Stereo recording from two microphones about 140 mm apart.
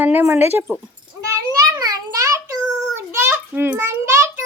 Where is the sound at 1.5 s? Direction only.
25° right (ahead or behind).